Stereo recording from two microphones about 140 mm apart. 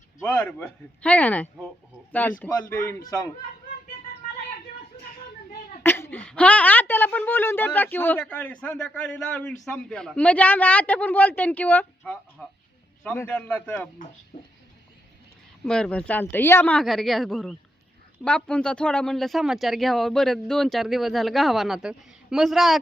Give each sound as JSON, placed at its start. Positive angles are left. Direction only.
{"t": 0.2, "sound": "a woman's voice", "side_deg": 5}
{"t": 5.8, "sound": "a woman's voice", "side_deg": 15}
{"t": 14.3, "sound": "a sound", "side_deg": 80}
{"t": 15.6, "sound": "a woman's voice", "side_deg": 5}
{"t": 16.8, "sound": "speech", "side_deg": 0}